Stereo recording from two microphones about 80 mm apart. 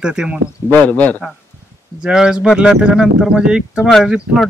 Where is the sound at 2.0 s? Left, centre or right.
Centre.